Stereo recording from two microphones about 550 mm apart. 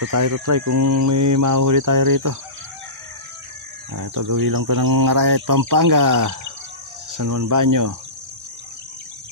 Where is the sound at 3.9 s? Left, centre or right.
Right.